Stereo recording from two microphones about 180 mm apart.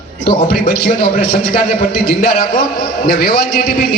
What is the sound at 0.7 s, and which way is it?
Speech, 65° left (ahead or behind).